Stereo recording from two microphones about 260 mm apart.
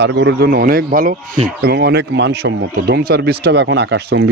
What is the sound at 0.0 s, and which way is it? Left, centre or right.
Speech, right.